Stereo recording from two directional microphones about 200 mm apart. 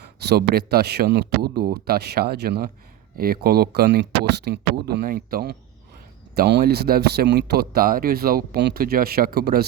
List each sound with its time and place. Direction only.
0.0 s speech: 55° right (ahead or behind)